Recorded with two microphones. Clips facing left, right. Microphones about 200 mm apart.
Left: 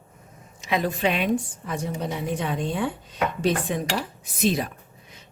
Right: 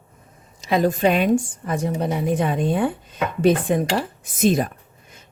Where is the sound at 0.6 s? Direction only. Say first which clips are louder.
Right 6 dB; 40° right (ahead or behind).